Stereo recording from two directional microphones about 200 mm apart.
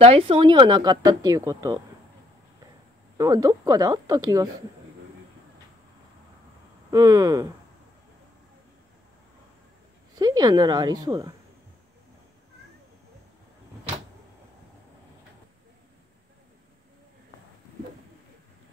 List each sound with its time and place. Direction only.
0.0 s speech: 30° right (ahead or behind)
3.2 s speech: 15° right (ahead or behind)
6.9 s speech: 15° right (ahead or behind)
10.1 s speech: 20° right (ahead or behind)